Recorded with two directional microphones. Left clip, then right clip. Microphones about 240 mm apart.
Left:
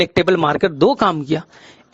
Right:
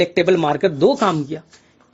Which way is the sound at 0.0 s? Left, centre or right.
Left.